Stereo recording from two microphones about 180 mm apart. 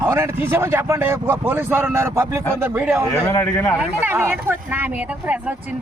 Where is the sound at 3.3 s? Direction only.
15° left (ahead or behind).